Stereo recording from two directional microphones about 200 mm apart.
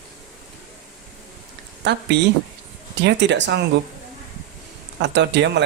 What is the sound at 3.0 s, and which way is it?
Speech, 60° right (ahead or behind).